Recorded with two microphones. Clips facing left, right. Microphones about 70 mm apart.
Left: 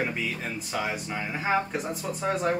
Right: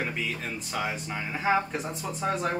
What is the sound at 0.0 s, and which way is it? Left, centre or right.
Speech, centre.